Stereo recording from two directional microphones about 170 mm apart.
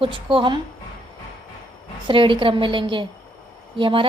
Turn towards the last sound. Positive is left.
turn(degrees=-30)  # may be behind; listen again after turning